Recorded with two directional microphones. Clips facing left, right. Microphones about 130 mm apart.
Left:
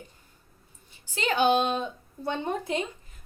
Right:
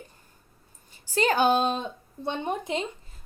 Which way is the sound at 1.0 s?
40° right (ahead or behind).